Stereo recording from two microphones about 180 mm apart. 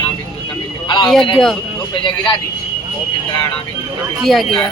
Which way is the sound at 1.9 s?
25° left (ahead or behind).